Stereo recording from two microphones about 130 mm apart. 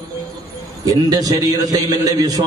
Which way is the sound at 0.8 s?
30° right (ahead or behind).